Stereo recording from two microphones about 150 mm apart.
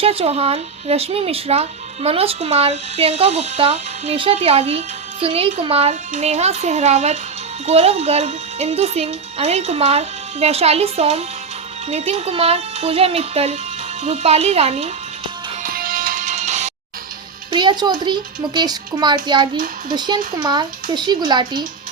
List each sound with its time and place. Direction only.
0.0 s speech: 40° right (ahead or behind)
15.6 s music: 70° right (ahead or behind); by 16.7 s 50° right (ahead or behind)
17.5 s a child's voice: 30° right (ahead or behind)